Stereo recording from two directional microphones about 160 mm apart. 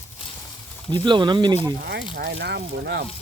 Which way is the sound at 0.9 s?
30° right (ahead or behind).